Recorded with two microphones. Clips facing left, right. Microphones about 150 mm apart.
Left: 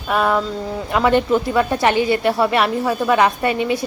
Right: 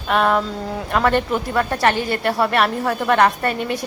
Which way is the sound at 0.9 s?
10° left (ahead or behind).